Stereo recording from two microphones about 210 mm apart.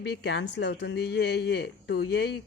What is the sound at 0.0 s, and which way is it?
Speech, 55° left (ahead or behind).